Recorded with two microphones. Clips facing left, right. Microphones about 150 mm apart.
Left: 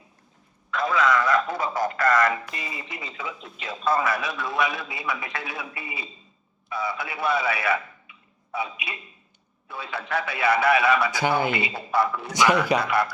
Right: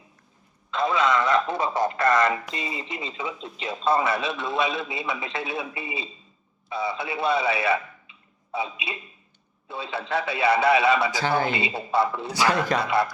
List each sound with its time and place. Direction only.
0.7 s a man's voice: 25° right (ahead or behind)
11.2 s speech: 15° left (ahead or behind)
11.5 s a man's voice: 25° right (ahead or behind)
12.3 s speech: 15° left (ahead or behind)
12.8 s a man's voice: 25° right (ahead or behind)